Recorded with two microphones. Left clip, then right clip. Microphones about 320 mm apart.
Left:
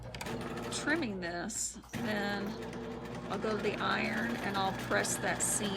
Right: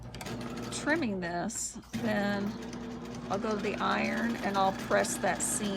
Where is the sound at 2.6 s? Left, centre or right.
Left.